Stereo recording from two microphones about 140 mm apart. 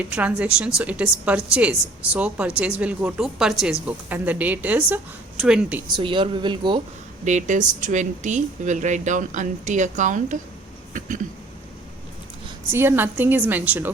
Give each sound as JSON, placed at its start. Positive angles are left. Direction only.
{"t": 0.0, "sound": "a woman's voice", "side_deg": -10}
{"t": 6.0, "sound": "speech", "side_deg": -35}
{"t": 7.3, "sound": "speech", "side_deg": -60}
{"t": 12.7, "sound": "a woman's voice", "side_deg": -15}